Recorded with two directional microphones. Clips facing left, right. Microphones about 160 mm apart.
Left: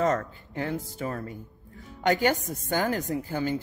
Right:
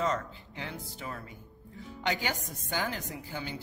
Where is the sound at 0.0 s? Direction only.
50° left (ahead or behind).